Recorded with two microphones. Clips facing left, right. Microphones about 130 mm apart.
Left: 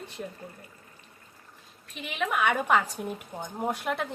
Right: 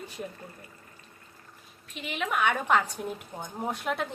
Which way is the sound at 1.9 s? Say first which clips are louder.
Left 1 dB; centre (ahead or behind).